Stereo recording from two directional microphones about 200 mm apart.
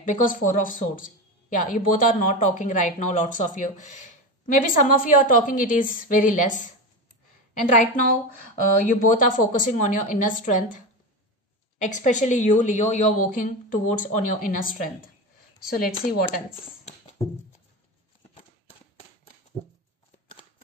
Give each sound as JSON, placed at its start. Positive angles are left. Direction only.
{"t": 0.0, "sound": "speech", "side_deg": 40}
{"t": 11.8, "sound": "speech", "side_deg": 40}